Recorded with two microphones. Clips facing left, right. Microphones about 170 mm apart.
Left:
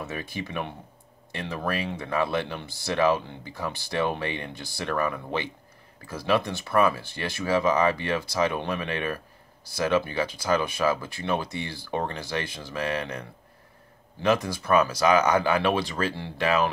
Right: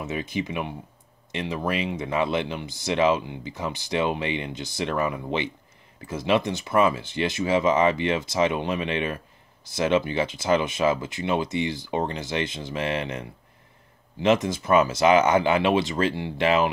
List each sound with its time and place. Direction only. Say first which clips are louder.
0.0 s speech: right 5 dB; 20° right (ahead or behind)
14.2 s speech: right 3 dB; 25° right (ahead or behind)